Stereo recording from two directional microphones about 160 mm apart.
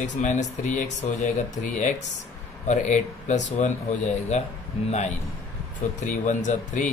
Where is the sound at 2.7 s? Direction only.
50° left (ahead or behind).